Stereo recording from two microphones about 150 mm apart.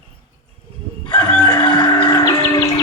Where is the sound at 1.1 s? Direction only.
10° left (ahead or behind).